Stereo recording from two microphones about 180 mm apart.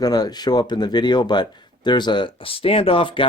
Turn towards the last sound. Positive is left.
turn(degrees=30)  # may be behind; listen again after turning